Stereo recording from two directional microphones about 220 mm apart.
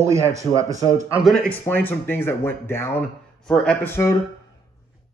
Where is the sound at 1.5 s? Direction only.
10° left (ahead or behind).